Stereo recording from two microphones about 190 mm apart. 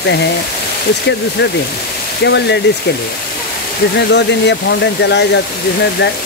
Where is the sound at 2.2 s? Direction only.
65° left (ahead or behind).